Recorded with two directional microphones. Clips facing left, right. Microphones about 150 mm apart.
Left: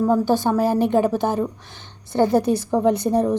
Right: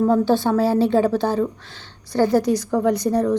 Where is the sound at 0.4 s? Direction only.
15° left (ahead or behind).